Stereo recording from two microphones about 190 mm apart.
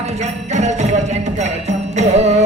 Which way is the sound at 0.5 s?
35° right (ahead or behind).